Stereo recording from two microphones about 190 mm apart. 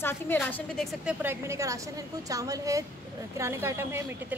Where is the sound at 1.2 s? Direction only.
15° right (ahead or behind).